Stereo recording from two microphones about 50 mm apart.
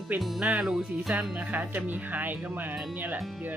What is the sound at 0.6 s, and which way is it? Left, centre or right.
Speech, centre.